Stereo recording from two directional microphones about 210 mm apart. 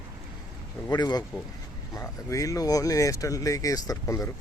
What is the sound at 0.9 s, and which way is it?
Speech, 20° left (ahead or behind).